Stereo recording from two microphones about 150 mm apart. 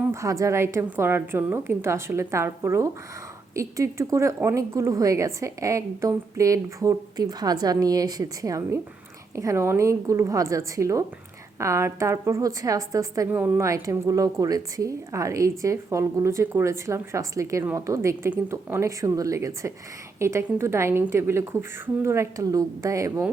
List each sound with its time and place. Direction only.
0.1 s a woman's voice: 20° right (ahead or behind)